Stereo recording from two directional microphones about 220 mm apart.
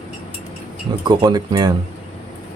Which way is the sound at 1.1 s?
20° right (ahead or behind).